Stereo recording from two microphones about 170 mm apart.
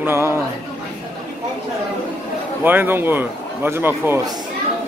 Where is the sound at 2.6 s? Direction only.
10° right (ahead or behind).